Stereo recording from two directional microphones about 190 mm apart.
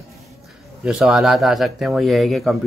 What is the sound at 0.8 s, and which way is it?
Speech, centre (ahead or behind).